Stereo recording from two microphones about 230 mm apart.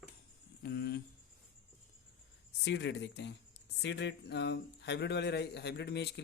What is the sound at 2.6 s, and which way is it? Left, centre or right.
Speech, left.